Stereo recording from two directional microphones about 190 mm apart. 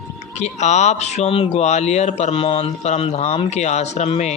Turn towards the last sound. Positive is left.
turn(degrees=35)  # may be behind; listen again after turning